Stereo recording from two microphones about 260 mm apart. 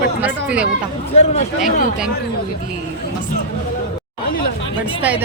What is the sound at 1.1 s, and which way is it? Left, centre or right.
Speech, left.